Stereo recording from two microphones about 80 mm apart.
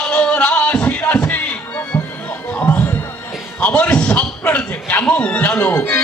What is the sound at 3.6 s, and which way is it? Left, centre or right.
A man's voice, centre.